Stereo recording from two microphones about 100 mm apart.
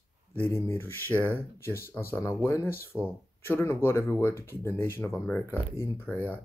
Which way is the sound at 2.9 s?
15° right (ahead or behind).